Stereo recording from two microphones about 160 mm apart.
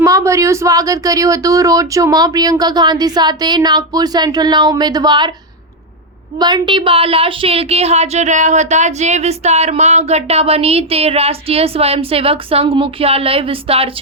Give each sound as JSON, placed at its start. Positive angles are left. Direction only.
{"t": 0.0, "sound": "speech", "side_deg": -20}
{"t": 6.4, "sound": "a woman's voice", "side_deg": -30}